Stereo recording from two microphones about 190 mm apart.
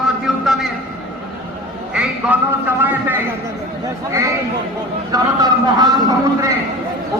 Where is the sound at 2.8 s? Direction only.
10° right (ahead or behind).